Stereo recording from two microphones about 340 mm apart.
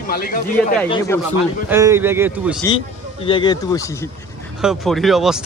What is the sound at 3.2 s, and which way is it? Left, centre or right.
Speech, centre.